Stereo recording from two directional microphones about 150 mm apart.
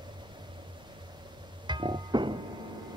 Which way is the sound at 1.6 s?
30° right (ahead or behind).